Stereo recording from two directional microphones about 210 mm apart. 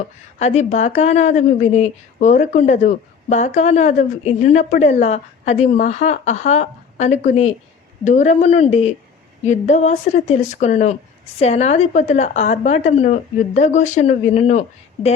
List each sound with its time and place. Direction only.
0.3 s speech: 30° left (ahead or behind)